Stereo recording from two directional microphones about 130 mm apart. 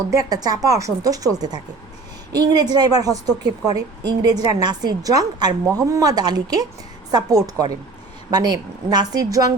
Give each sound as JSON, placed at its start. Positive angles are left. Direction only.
{"t": 0.1, "sound": "a woman's voice", "side_deg": -30}